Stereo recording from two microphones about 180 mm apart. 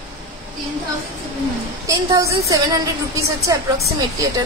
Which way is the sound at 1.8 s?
15° right (ahead or behind).